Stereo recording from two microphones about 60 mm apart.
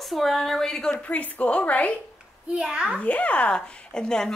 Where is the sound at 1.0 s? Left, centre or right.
Left.